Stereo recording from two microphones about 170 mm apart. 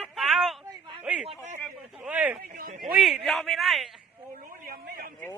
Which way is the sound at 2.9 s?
Centre (ahead or behind).